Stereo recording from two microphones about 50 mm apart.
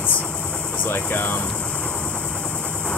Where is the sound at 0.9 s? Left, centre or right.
Left.